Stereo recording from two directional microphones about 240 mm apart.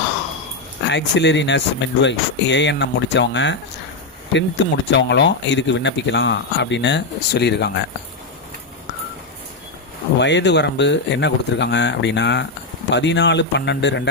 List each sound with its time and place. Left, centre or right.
0.9 s speech: left
10.2 s speech: left